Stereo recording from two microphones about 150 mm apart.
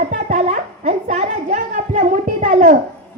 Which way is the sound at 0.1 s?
60° right (ahead or behind).